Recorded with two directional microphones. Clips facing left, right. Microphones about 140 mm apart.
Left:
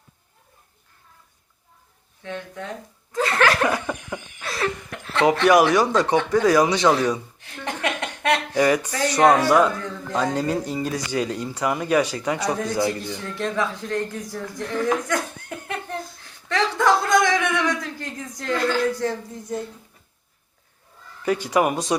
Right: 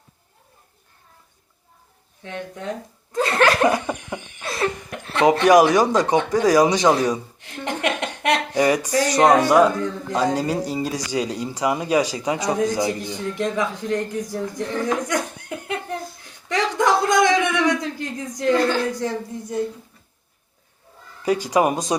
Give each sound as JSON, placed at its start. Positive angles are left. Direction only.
{"t": 2.2, "sound": "speech", "side_deg": -20}
{"t": 3.1, "sound": "laughter", "side_deg": -25}
{"t": 6.5, "sound": "speech", "side_deg": -15}
{"t": 7.1, "sound": "a sound", "side_deg": -20}
{"t": 8.9, "sound": "speech", "side_deg": -15}
{"t": 15.0, "sound": "laughter", "side_deg": -15}
{"t": 16.5, "sound": "a sound", "side_deg": -15}
{"t": 18.3, "sound": "speech", "side_deg": -15}
{"t": 21.5, "sound": "speech", "side_deg": -20}